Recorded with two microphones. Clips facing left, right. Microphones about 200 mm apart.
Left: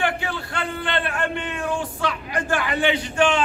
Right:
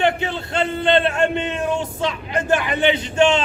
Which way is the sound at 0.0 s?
20° right (ahead or behind).